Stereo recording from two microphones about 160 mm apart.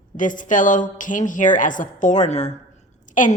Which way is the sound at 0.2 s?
55° left (ahead or behind).